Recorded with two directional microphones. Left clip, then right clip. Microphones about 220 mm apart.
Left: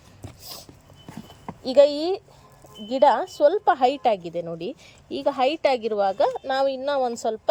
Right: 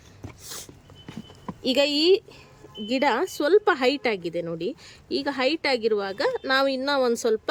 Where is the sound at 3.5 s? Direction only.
30° right (ahead or behind).